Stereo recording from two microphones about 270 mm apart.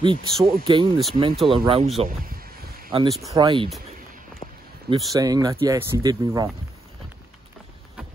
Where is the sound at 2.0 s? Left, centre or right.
Right.